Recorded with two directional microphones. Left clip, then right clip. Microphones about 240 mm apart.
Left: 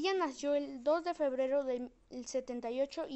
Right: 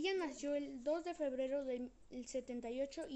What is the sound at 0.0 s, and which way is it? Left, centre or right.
A woman's voice, centre.